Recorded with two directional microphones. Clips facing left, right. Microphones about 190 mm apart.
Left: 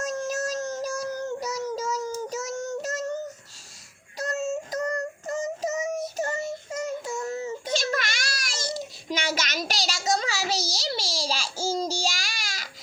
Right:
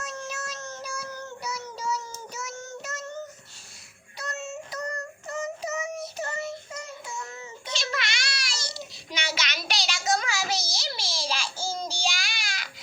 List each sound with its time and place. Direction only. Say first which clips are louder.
0.0 s child singing: left 8 dB; 45° left (ahead or behind)
4.2 s child singing: left 7 dB; 45° left (ahead or behind)
11.6 s babbling: left 7 dB; 40° left (ahead or behind)